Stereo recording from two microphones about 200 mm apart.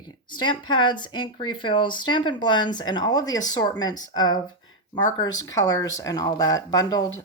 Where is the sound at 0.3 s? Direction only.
25° left (ahead or behind).